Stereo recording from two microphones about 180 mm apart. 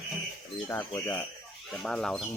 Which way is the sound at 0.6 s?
15° left (ahead or behind).